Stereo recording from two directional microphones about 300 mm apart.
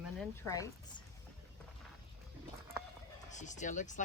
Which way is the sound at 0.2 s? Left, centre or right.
Centre.